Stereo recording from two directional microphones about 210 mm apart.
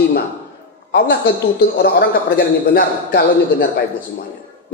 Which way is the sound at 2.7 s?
50° left (ahead or behind).